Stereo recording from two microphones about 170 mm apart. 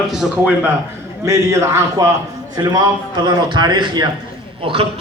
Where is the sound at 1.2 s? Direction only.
20° right (ahead or behind).